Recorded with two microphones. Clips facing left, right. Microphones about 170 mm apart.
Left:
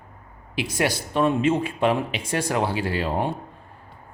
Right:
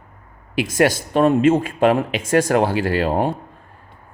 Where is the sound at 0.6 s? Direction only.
45° right (ahead or behind).